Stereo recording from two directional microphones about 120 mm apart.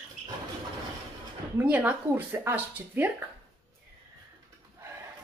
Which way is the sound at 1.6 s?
10° right (ahead or behind).